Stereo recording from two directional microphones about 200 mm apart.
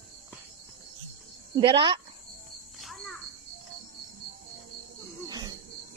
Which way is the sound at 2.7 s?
Centre (ahead or behind).